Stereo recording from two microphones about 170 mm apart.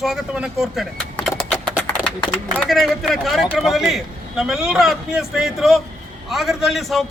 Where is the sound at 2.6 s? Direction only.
Centre (ahead or behind).